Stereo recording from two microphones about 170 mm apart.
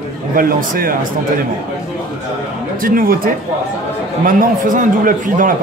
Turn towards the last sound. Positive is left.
turn(degrees=-50)  # may be behind; listen again after turning